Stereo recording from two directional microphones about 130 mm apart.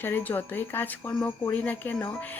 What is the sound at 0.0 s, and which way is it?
A woman's voice, 15° left (ahead or behind).